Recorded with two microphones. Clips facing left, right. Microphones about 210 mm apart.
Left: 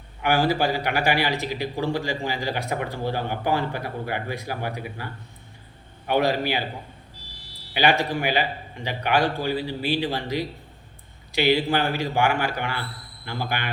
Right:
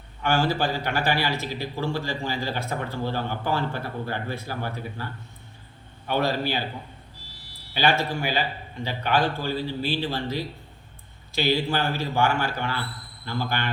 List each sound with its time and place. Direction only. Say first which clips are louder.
0.2 s a man's voice: left 2 dB; 15° left (ahead or behind)
7.7 s a man's voice: left 2 dB; 15° left (ahead or behind)